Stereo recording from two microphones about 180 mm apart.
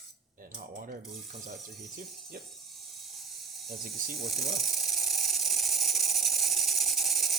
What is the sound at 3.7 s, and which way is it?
Rub, centre (ahead or behind).